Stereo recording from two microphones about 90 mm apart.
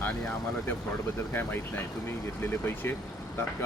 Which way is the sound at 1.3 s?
25° left (ahead or behind).